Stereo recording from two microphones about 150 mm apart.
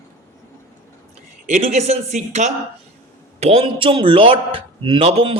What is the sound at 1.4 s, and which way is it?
A woman's voice, 55° right (ahead or behind).